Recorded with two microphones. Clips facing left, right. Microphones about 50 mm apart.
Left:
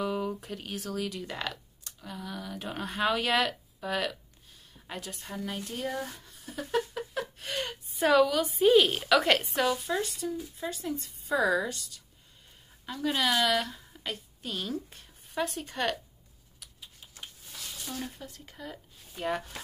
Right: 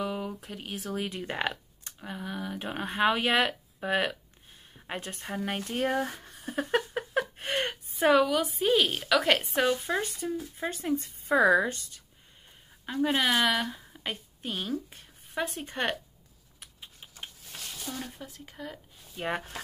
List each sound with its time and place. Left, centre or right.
0.0 s a sound: centre
0.6 s a woman's voice: centre
0.9 s speech: right
8.0 s a woman's voice: centre
8.5 s a woman's voice: centre
9.6 s a woman's voice: right; by 15.0 s centre
15.3 s speech: centre
16.5 s typing: right
17.6 s a sound: right
18.3 s speech: centre